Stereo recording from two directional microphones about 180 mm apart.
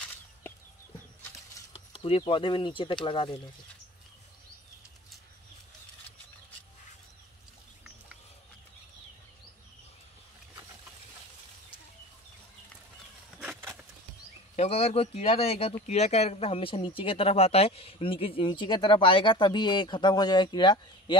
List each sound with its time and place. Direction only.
1.7 s speech: 30° left (ahead or behind)
13.4 s a sound: 10° right (ahead or behind)
14.5 s speech: 35° left (ahead or behind)